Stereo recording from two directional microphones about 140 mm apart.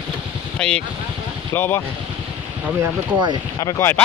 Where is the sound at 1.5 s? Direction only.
15° left (ahead or behind).